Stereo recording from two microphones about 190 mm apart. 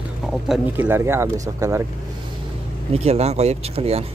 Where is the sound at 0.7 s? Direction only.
10° right (ahead or behind).